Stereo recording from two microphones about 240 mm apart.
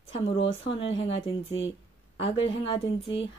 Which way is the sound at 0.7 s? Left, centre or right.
Left.